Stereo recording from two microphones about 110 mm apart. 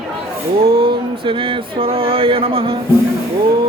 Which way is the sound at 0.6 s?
55° right (ahead or behind).